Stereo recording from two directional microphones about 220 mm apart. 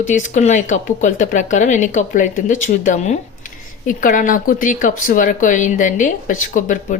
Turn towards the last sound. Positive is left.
turn(degrees=35)  # may be behind; listen again after turning